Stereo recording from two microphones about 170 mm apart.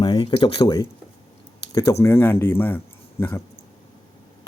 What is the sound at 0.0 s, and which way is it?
Speech, 30° left (ahead or behind).